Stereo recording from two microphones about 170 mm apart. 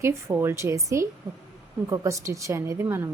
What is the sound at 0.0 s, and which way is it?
Speech, 15° right (ahead or behind).